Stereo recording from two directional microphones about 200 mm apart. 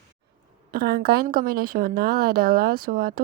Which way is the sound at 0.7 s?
50° right (ahead or behind).